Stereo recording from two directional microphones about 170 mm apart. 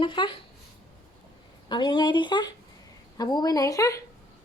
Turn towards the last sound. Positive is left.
turn(degrees=20)  # may be behind; listen again after turning